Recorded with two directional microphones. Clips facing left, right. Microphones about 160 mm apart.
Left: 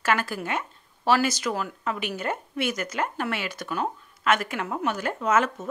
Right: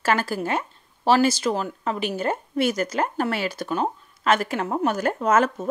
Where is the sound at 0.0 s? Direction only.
35° right (ahead or behind).